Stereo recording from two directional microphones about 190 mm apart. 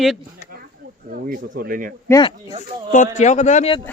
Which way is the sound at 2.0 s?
20° left (ahead or behind).